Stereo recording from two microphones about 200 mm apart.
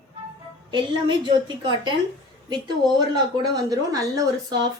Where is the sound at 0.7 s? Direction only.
25° right (ahead or behind).